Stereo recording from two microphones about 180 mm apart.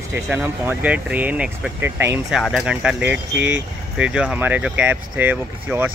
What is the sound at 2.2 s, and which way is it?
Speech, centre (ahead or behind).